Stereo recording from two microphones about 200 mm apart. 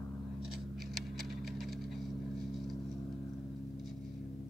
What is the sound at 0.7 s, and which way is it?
Patter, centre (ahead or behind).